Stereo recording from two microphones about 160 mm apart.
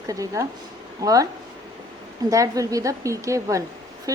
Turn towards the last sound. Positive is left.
turn(degrees=-20)  # may be behind; listen again after turning